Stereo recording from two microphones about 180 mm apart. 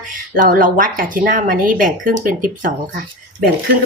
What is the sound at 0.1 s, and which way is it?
Speech, 50° right (ahead or behind).